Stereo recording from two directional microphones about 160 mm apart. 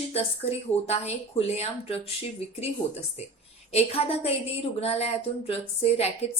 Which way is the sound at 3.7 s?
40° left (ahead or behind).